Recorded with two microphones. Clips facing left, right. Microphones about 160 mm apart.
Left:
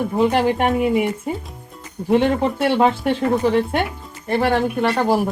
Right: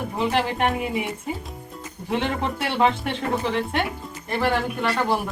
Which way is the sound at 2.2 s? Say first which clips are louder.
Left 8 dB; 45° left (ahead or behind).